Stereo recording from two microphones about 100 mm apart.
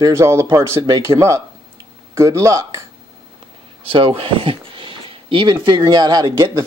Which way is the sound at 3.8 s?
70° right (ahead or behind).